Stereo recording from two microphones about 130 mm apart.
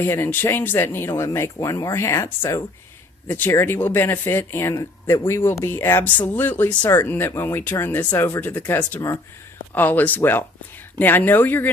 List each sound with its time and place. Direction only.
0.0 s speech: 20° left (ahead or behind)